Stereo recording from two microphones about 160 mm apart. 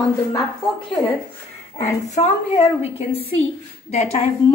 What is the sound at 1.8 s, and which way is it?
A woman's voice, 45° left (ahead or behind).